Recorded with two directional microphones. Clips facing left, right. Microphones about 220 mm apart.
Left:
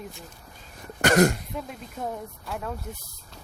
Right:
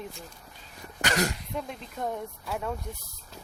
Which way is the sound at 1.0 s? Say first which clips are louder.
Left 9 dB; 50° left (ahead or behind).